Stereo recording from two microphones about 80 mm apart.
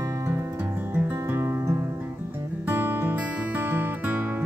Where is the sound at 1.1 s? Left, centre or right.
Right.